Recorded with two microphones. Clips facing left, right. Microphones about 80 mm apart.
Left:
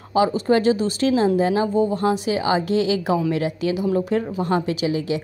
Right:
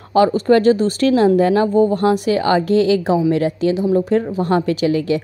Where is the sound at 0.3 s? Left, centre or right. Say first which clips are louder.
Right 5 dB; right.